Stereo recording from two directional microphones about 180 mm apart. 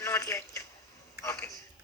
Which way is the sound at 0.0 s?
15° left (ahead or behind).